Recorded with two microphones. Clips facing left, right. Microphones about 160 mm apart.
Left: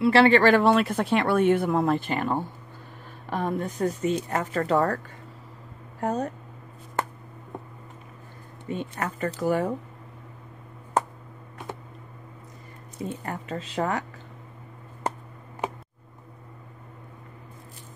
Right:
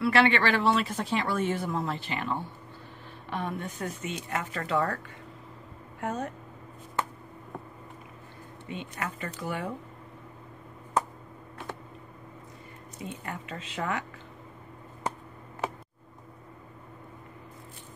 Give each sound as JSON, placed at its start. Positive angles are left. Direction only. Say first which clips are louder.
{"t": 0.0, "sound": "speech", "louder": "left 6 dB", "side_deg": 35}
{"t": 7.0, "sound": "a sound", "louder": "left 3 dB", "side_deg": 45}
{"t": 8.6, "sound": "speech", "louder": "left 6 dB", "side_deg": 45}
{"t": 13.0, "sound": "speech", "louder": "left 6 dB", "side_deg": 40}